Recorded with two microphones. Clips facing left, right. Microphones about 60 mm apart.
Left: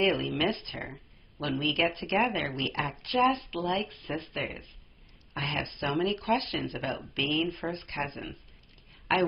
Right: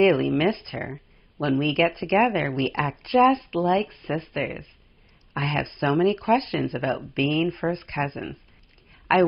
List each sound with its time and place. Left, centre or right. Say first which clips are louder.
0.0 s speech: right 8 dB; right